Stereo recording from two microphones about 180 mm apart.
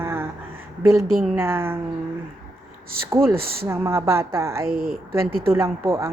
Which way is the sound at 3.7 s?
15° right (ahead or behind).